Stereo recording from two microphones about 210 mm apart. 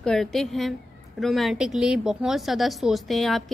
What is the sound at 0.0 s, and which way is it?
A woman's voice, centre (ahead or behind).